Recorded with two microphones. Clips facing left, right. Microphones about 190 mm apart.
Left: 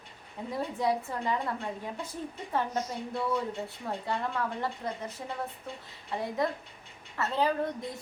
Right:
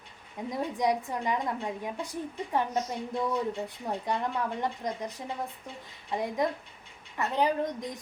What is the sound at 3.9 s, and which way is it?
A woman's voice, 15° right (ahead or behind).